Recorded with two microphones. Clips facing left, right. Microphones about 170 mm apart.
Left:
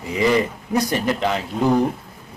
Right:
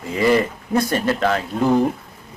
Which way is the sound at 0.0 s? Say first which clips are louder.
Right 1 dB; 15° left (ahead or behind).